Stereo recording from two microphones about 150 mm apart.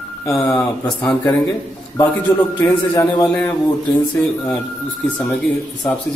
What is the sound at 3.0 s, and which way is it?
Speech, 20° left (ahead or behind).